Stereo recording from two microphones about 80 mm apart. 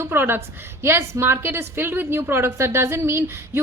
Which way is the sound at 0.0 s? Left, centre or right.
Right.